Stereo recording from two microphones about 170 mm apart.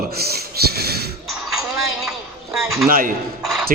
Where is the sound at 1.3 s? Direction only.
Centre (ahead or behind).